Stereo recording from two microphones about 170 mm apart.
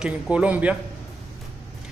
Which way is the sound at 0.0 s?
5° right (ahead or behind).